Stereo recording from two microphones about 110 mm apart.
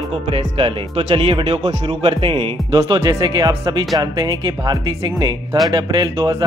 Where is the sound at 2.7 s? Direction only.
35° right (ahead or behind).